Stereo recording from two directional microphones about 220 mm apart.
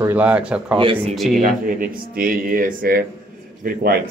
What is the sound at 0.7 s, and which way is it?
Speech, 25° right (ahead or behind).